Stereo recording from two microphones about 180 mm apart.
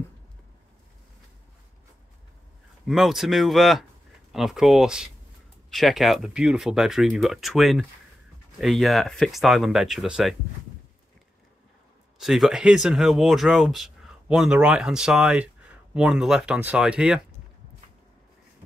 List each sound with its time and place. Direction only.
2.9 s speech: centre (ahead or behind)
12.2 s speech: centre (ahead or behind)